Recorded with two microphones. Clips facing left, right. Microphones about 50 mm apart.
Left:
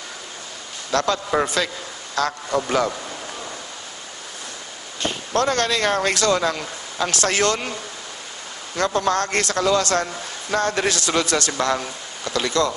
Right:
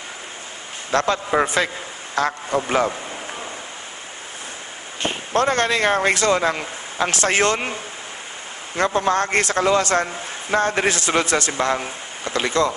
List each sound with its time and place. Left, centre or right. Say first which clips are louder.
0.9 s a man's voice: right 1 dB; right
5.0 s a man's voice: right 1 dB; right